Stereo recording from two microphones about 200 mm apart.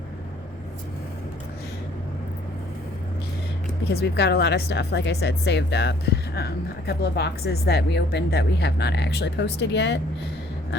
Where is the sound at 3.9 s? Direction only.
55° left (ahead or behind).